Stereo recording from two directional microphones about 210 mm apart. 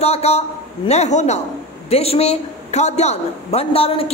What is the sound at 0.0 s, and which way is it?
A woman's voice, 30° left (ahead or behind).